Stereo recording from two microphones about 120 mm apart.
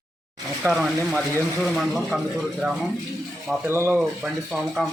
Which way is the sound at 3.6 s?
20° right (ahead or behind).